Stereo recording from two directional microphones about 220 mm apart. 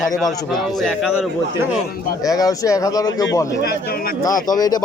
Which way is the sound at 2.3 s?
15° left (ahead or behind).